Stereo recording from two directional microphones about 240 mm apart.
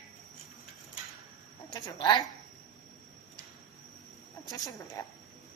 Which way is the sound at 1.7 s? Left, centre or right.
Centre.